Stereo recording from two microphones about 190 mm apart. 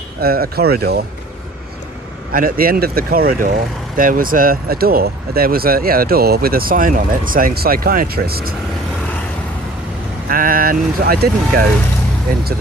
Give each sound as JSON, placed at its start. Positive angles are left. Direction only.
{"t": 0.2, "sound": "speech", "side_deg": -55}
{"t": 2.3, "sound": "speech", "side_deg": -50}
{"t": 10.2, "sound": "speech", "side_deg": -50}